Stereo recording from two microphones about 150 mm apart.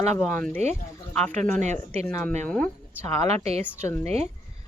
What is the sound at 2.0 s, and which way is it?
Speech, 5° left (ahead or behind).